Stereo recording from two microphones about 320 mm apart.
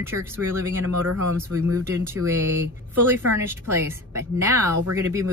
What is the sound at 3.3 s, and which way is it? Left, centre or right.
Speech, centre.